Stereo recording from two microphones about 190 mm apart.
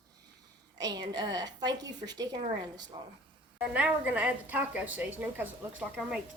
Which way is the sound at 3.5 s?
5° right (ahead or behind).